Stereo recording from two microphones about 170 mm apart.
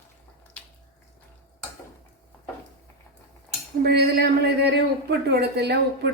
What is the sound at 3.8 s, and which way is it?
Speech, 70° right (ahead or behind).